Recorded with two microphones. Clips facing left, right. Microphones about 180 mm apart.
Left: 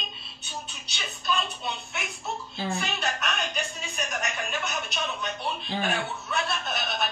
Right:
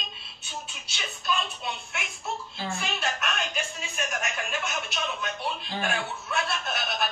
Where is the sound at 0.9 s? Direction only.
Centre (ahead or behind).